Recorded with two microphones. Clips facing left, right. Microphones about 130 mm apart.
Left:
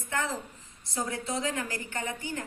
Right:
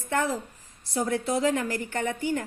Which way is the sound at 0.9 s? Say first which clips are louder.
Right 6 dB; 60° right (ahead or behind).